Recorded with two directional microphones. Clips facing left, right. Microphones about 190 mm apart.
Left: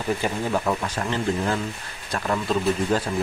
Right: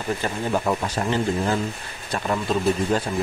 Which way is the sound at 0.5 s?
5° right (ahead or behind).